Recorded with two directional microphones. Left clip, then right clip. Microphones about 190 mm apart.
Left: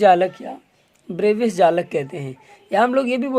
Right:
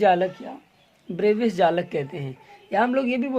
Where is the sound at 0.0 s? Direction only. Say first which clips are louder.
Left 5 dB; 30° left (ahead or behind).